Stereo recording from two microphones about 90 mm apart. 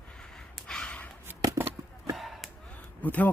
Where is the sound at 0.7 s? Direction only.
10° left (ahead or behind).